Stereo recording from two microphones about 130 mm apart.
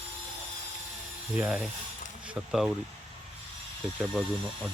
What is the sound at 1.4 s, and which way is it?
Speech, 10° right (ahead or behind).